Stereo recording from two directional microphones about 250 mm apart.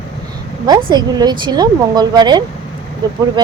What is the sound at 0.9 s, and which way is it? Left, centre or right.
Speech, centre.